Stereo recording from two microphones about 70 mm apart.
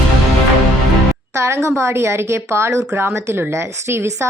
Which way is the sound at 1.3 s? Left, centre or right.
Right.